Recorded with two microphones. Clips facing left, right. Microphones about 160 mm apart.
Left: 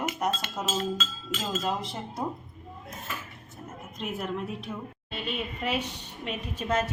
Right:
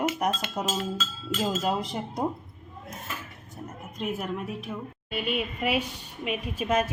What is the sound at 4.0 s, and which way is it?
A woman's voice, 10° right (ahead or behind).